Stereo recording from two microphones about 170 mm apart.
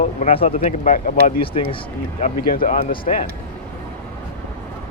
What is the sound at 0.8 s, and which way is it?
Speech, 55° left (ahead or behind).